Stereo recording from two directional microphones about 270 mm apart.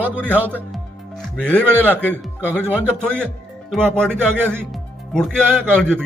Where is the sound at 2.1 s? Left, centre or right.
Centre.